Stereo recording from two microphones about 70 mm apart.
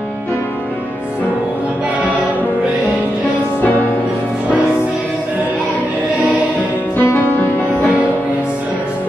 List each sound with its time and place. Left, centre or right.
7.0 s music: left